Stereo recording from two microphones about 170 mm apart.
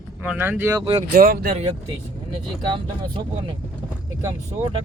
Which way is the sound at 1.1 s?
60° right (ahead or behind).